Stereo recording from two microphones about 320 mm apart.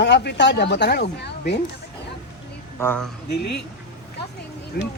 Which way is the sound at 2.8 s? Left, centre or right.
Centre.